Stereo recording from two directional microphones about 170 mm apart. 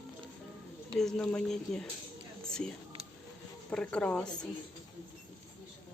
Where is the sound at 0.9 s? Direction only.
5° left (ahead or behind).